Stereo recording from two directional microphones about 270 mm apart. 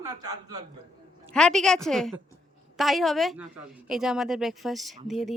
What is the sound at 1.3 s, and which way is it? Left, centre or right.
A woman's voice, centre.